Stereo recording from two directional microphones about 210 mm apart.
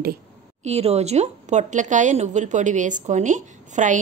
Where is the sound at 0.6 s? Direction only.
30° right (ahead or behind).